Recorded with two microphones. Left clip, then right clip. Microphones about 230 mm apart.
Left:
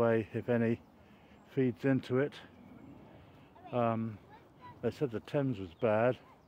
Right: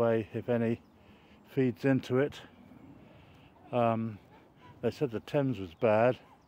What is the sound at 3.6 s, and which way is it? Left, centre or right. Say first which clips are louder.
Speech: right 4 dB; centre.